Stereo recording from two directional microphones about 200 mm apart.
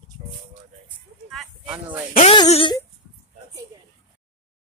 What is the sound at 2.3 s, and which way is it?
Speech, 25° left (ahead or behind).